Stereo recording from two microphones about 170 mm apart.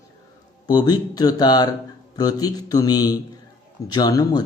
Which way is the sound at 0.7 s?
25° left (ahead or behind).